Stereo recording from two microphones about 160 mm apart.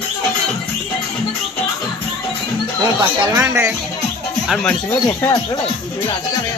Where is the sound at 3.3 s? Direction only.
15° right (ahead or behind).